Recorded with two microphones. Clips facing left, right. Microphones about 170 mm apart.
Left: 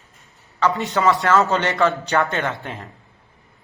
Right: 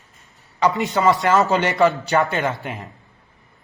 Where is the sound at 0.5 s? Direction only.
15° right (ahead or behind).